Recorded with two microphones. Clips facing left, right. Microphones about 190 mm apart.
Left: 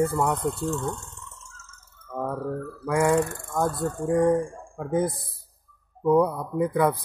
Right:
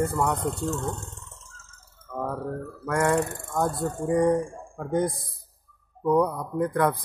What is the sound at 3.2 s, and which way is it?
Speech, 20° right (ahead or behind).